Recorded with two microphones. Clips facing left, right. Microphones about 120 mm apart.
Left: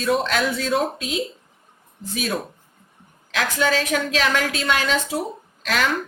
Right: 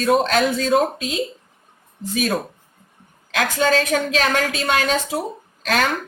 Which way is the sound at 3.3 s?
45° right (ahead or behind).